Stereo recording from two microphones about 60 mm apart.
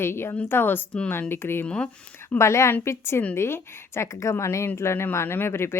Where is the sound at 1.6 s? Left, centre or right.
Centre.